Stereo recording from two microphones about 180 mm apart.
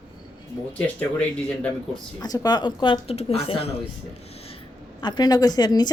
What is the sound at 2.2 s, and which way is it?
Speech, 20° left (ahead or behind).